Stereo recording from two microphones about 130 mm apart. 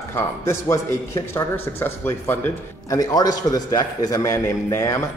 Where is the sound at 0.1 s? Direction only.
25° left (ahead or behind).